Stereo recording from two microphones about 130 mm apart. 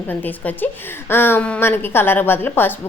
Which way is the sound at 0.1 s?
15° left (ahead or behind).